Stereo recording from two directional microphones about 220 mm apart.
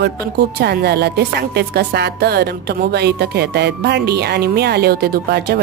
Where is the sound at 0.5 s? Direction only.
45° right (ahead or behind).